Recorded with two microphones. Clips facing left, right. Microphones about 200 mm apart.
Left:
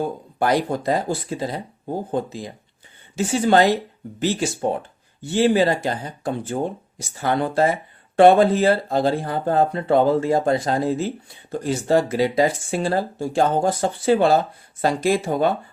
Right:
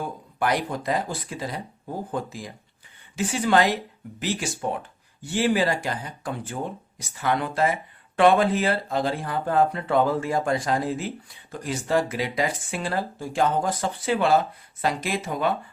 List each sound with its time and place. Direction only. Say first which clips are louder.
0.3 s speech: left 5 dB; 30° left (ahead or behind)